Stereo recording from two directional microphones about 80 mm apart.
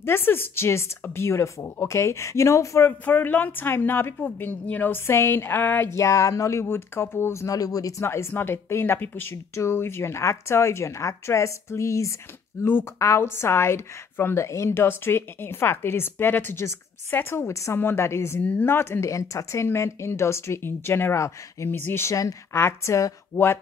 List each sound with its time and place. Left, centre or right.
0.0 s a woman's voice: left
2.9 s speech: left
5.9 s a woman's voice: left
7.4 s speech: left
8.0 s a woman's voice: left
18.4 s a woman's voice: left
22.1 s a woman's voice: left